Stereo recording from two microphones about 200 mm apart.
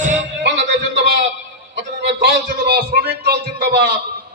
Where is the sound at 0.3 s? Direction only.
60° right (ahead or behind).